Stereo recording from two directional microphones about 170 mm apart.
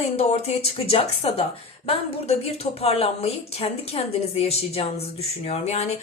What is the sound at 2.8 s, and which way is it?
A woman's voice, 35° left (ahead or behind).